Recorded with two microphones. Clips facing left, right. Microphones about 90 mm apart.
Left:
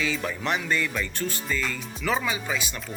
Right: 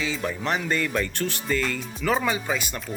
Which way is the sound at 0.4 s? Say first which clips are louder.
Right 1 dB; 40° right (ahead or behind).